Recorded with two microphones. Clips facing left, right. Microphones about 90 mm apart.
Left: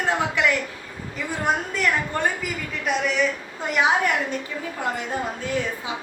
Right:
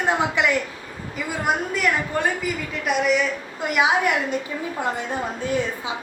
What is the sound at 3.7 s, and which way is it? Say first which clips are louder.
A woman's voice: right 1 dB; 10° right (ahead or behind).